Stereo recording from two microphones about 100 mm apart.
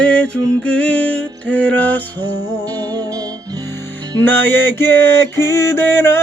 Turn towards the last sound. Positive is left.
turn(degrees=25)  # may be behind; listen again after turning